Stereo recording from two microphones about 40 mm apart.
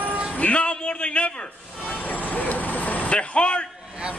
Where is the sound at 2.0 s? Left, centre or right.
Left.